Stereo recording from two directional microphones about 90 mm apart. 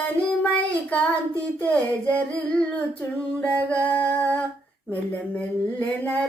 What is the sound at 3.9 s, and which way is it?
Music, 20° left (ahead or behind).